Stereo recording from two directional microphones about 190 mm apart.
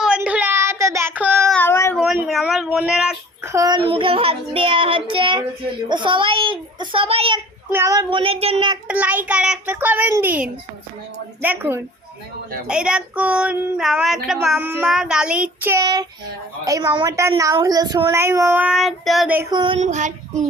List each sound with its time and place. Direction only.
0.0 s child singing: 5° right (ahead or behind)
1.5 s child singing: 10° left (ahead or behind)
2.0 s a sound: centre (ahead or behind)
3.4 s child singing: 15° right (ahead or behind)
7.7 s child singing: 15° right (ahead or behind)
8.9 s a woman's voice: 10° right (ahead or behind)
19.4 s child singing: 20° right (ahead or behind)
19.8 s child singing: 40° right (ahead or behind)